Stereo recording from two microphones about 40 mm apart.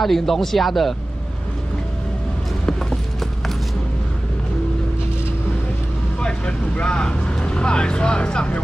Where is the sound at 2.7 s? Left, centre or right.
Centre.